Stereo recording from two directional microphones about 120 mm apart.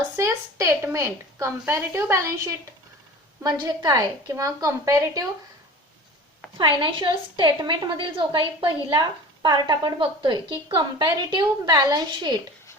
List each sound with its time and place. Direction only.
0.2 s a woman's voice: 25° right (ahead or behind)
3.4 s a woman's voice: 35° right (ahead or behind)
6.6 s a woman's voice: 40° right (ahead or behind)